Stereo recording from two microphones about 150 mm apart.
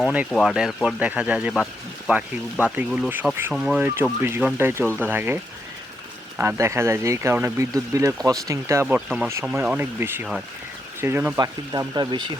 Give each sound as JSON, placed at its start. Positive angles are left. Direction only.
{"t": 0.0, "sound": "speech", "side_deg": -10}
{"t": 9.0, "sound": "speech", "side_deg": 0}
{"t": 9.2, "sound": "speech", "side_deg": -10}
{"t": 11.3, "sound": "speech", "side_deg": -25}